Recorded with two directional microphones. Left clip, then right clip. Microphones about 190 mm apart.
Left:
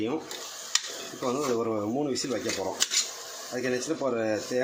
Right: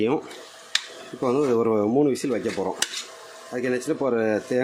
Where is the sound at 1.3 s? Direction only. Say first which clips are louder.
Right 7 dB; 45° right (ahead or behind).